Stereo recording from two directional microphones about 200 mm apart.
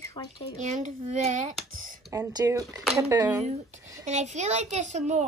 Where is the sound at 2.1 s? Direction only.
15° right (ahead or behind).